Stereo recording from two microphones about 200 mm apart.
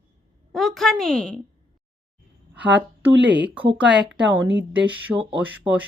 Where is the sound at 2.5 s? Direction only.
5° right (ahead or behind).